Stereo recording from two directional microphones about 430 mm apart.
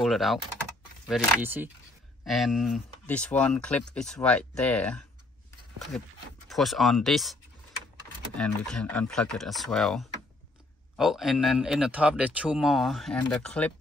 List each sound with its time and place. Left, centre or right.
0.0 s speech: centre
6.5 s speech: centre
8.4 s speech: centre